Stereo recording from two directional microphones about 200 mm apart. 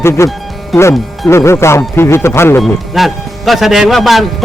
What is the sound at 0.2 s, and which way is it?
Speech, 15° left (ahead or behind).